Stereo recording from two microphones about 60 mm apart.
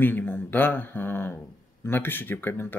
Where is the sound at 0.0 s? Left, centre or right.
Left.